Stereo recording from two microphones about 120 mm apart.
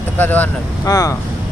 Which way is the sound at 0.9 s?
25° left (ahead or behind).